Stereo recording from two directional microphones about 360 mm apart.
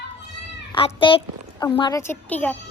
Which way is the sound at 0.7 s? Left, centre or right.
Centre.